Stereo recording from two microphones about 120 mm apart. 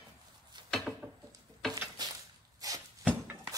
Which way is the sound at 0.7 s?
Centre (ahead or behind).